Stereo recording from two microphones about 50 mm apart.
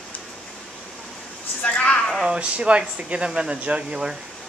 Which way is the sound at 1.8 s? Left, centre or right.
Left.